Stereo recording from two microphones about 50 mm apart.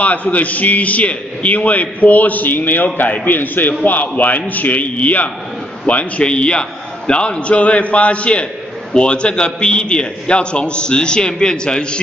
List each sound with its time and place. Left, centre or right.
0.0 s a man's voice: left